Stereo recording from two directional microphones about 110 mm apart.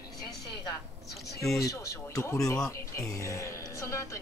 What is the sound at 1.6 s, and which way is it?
A woman's voice, 30° left (ahead or behind).